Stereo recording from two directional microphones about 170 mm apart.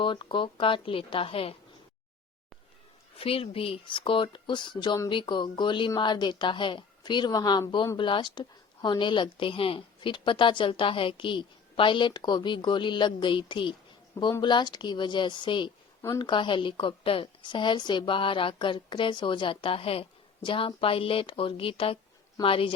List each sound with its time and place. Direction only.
0.0 s a woman's voice: 30° left (ahead or behind)
3.2 s a woman's voice: 35° left (ahead or behind)